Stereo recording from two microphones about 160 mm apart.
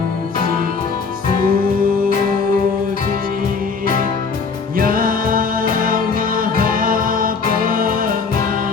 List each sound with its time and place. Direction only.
1.4 s music: 65° right (ahead or behind)
4.8 s music: 60° right (ahead or behind)